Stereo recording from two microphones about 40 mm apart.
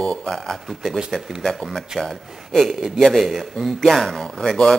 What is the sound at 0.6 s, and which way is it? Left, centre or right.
Speech, centre.